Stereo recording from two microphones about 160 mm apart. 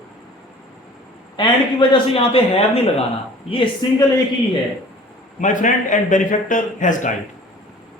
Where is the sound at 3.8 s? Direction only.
25° left (ahead or behind).